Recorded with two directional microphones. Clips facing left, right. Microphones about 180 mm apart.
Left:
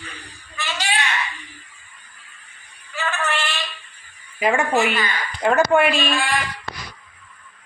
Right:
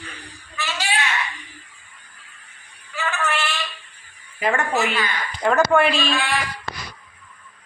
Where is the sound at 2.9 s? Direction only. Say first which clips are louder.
Even; 10° right (ahead or behind).